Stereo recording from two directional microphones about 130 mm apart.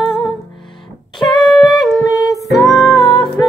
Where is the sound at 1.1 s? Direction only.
35° left (ahead or behind).